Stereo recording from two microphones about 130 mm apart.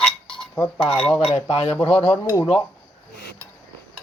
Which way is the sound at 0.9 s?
5° left (ahead or behind).